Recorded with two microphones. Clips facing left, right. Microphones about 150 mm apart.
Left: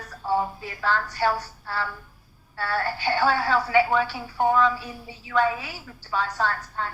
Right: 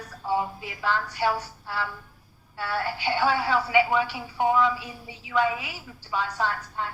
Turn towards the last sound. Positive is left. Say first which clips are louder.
# left 1 dB
turn(degrees=-15)  # may be behind; listen again after turning